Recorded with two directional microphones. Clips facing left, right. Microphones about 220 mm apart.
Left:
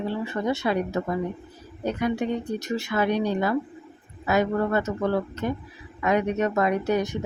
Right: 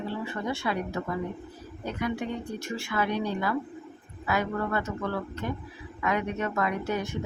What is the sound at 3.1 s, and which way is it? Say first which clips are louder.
Speech: left 7 dB; 20° left (ahead or behind).